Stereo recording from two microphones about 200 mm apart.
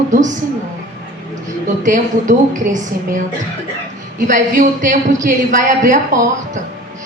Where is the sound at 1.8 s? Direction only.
40° right (ahead or behind).